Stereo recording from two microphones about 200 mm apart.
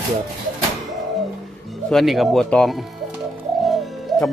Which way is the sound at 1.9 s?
Centre (ahead or behind).